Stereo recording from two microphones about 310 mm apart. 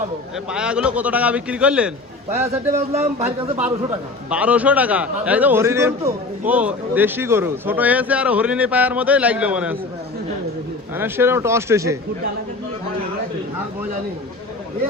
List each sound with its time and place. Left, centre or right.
0.5 s speech: centre
2.7 s speech: right
4.3 s speech: centre
10.9 s speech: centre